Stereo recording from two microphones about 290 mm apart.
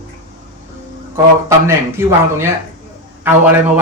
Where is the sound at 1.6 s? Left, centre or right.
Centre.